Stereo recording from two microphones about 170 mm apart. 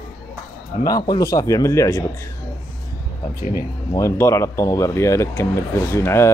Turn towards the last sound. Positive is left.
turn(degrees=15)  # may be behind; listen again after turning